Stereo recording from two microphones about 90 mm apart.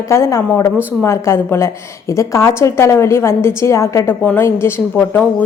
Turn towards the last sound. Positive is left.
turn(degrees=25)  # may be behind; listen again after turning